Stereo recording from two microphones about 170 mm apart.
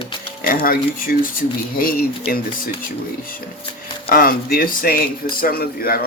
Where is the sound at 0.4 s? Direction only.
60° left (ahead or behind).